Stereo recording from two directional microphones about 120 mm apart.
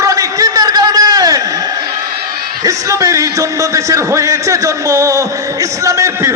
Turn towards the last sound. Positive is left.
turn(degrees=-25)  # may be behind; listen again after turning